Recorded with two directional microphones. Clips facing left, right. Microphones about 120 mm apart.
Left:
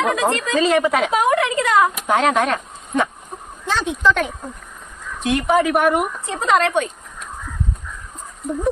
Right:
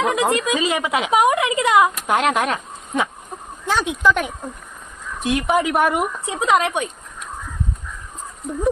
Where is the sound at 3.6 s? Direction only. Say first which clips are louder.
Right 1 dB; 15° right (ahead or behind).